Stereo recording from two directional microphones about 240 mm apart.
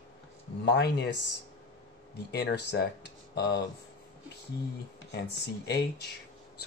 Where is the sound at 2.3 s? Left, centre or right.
Left.